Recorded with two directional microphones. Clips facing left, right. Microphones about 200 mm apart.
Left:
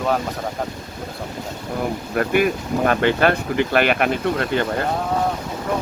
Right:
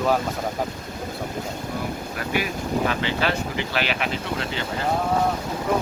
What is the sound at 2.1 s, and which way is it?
Speech, 55° left (ahead or behind).